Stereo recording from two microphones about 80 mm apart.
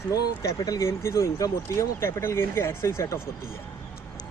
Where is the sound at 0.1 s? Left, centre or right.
Left.